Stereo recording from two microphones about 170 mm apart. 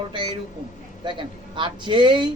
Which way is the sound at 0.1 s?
30° right (ahead or behind).